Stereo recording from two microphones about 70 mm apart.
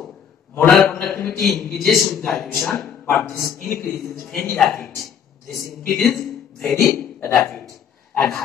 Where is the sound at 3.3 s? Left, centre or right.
Left.